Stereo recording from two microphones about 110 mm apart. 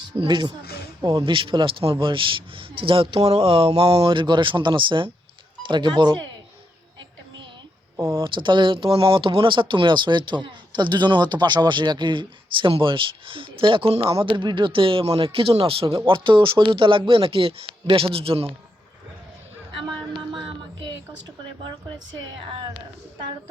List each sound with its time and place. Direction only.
0.2 s speech: 45° right (ahead or behind)
7.9 s speech: 20° right (ahead or behind)
8.2 s speech: 45° right (ahead or behind)
19.7 s a sound: 45° right (ahead or behind)